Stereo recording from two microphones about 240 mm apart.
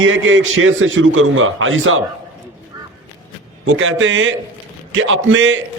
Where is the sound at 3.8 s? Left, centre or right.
Right.